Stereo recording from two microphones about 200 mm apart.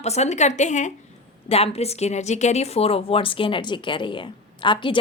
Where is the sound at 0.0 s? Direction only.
35° left (ahead or behind).